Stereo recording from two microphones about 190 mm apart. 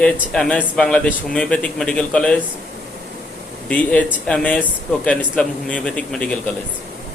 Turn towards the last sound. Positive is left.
turn(degrees=5)  # may be behind; listen again after turning